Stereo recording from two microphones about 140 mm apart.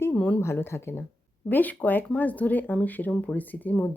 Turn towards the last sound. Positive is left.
turn(degrees=10)  # may be behind; listen again after turning